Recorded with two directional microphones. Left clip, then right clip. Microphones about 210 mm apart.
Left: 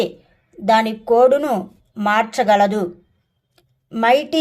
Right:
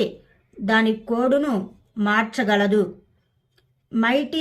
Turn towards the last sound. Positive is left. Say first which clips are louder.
# left 6 dB
turn(degrees=40)  # may be behind; listen again after turning